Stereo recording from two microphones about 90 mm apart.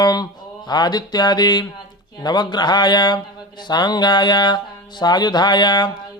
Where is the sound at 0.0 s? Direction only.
45° left (ahead or behind).